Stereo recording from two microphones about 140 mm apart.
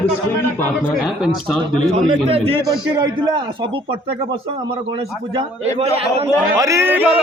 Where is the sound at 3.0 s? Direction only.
30° right (ahead or behind).